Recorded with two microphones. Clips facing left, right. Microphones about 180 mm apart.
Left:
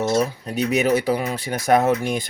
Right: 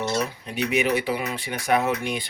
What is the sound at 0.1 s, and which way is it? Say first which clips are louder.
Speech: left 6 dB; 40° left (ahead or behind).